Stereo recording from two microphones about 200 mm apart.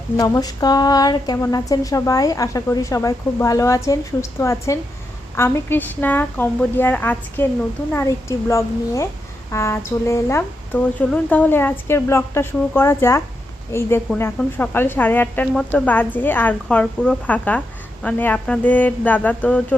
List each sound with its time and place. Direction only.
0.2 s speech: 20° left (ahead or behind)